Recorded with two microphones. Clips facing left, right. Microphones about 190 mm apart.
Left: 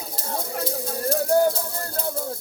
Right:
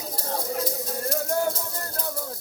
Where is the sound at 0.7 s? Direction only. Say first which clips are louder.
Left 3 dB; 30° left (ahead or behind).